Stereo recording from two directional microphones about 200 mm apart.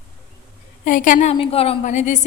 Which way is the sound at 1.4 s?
30° left (ahead or behind).